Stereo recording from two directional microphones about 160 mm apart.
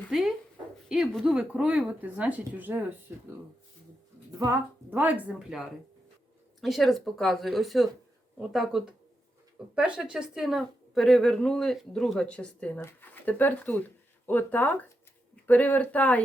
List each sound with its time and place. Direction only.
0.1 s a woman's voice: 5° right (ahead or behind)
4.3 s speech: 20° right (ahead or behind)
4.9 s a woman's voice: 10° right (ahead or behind); by 16.2 s 10° left (ahead or behind)